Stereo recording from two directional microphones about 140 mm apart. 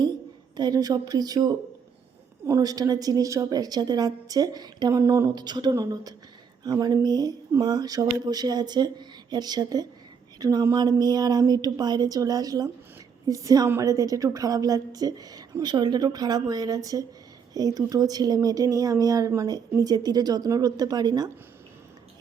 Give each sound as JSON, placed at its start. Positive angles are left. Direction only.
{"t": 0.5, "sound": "a woman's voice", "side_deg": -30}
{"t": 5.3, "sound": "a sound", "side_deg": -30}
{"t": 5.7, "sound": "a woman's voice", "side_deg": -25}